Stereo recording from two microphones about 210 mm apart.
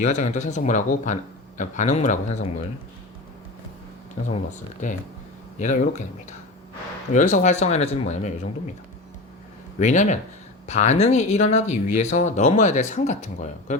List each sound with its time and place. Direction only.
0.0 s speech: 35° left (ahead or behind)
4.8 s speech: 35° left (ahead or behind)
7.1 s speech: 35° left (ahead or behind)
9.7 s speech: 35° left (ahead or behind)